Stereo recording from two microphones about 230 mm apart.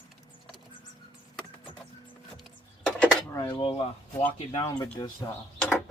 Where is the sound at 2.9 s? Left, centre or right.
Centre.